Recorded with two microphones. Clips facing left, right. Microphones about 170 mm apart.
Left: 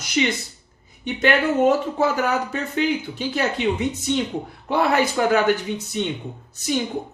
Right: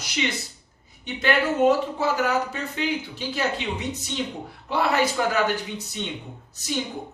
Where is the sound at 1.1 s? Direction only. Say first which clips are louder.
Left 3 dB; 50° left (ahead or behind).